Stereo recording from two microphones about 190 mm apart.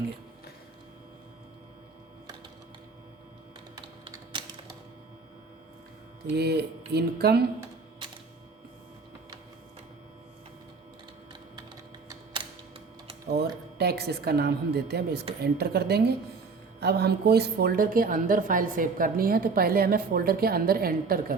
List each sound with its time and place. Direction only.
4.1 s typing: 25° right (ahead or behind)
6.3 s a woman's voice: 60° right (ahead or behind)
12.0 s a sound: 25° right (ahead or behind)
13.2 s a woman's voice: 60° right (ahead or behind)